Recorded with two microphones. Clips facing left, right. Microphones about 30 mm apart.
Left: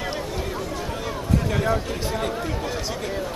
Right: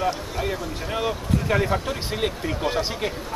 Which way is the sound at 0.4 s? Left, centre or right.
Right.